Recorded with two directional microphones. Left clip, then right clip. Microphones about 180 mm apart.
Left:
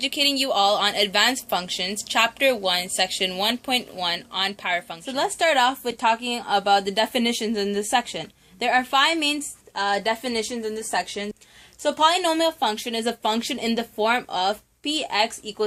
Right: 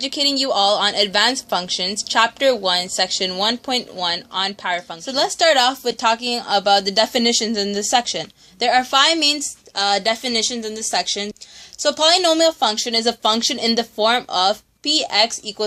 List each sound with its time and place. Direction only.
0.0 s speech: 35° right (ahead or behind)